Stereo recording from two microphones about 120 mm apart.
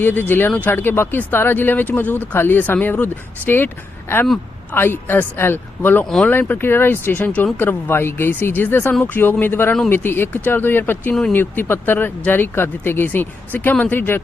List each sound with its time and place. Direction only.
0.0 s speech: 15° left (ahead or behind)
4.7 s speech: 15° left (ahead or behind)